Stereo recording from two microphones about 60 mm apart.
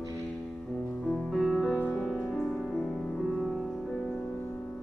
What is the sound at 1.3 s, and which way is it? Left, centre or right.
Music, centre.